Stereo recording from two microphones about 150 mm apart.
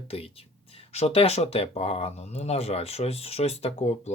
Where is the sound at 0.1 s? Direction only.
40° left (ahead or behind).